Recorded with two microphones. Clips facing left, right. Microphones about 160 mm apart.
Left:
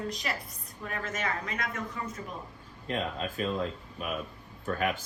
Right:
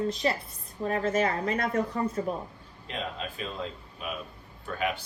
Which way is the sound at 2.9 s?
45° left (ahead or behind).